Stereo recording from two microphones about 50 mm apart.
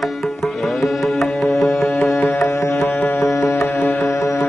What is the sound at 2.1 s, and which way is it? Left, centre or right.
Music, left.